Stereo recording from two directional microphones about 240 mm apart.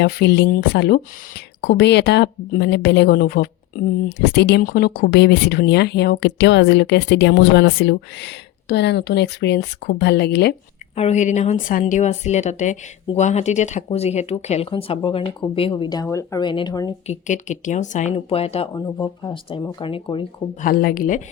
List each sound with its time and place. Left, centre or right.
0.0 s speech: left
10.9 s speech: left
17.1 s speech: left
20.7 s speech: left